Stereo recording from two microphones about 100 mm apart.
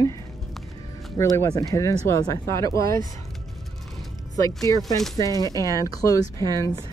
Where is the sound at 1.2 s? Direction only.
35° left (ahead or behind).